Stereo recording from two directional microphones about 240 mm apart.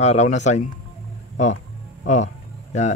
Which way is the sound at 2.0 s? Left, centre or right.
Left.